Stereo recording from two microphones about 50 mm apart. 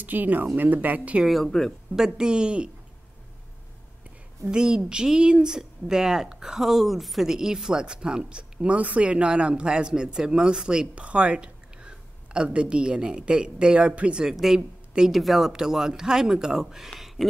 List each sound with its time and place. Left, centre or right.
0.0 s speech: right
1.4 s speech: centre
2.0 s speech: centre
4.5 s speech: centre
14.2 s speech: centre
16.9 s a sound: centre